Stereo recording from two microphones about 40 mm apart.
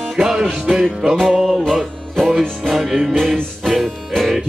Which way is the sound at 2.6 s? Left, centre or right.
Centre.